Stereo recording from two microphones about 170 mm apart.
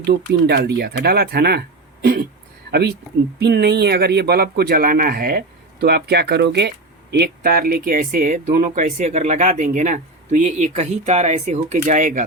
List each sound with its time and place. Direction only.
0.0 s speech: 75° right (ahead or behind)
3.3 s speech: 75° right (ahead or behind); by 5.4 s 60° right (ahead or behind)
5.8 s speech: 75° right (ahead or behind); by 12.2 s 50° right (ahead or behind)